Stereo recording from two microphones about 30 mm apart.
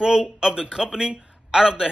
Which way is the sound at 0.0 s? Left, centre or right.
Right.